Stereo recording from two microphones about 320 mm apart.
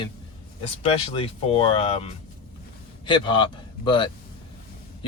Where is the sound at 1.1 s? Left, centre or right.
Centre.